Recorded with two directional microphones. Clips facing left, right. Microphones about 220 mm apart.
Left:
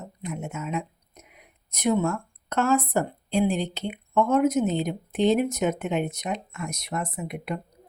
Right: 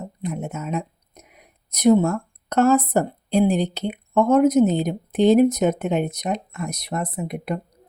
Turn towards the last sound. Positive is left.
turn(degrees=-40)  # may be behind; listen again after turning